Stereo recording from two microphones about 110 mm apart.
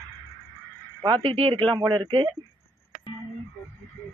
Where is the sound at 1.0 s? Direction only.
50° right (ahead or behind).